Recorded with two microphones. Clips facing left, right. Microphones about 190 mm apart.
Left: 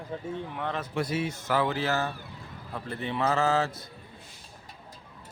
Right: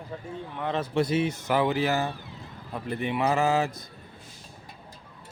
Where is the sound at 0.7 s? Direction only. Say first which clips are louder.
Right 6 dB; 25° right (ahead or behind).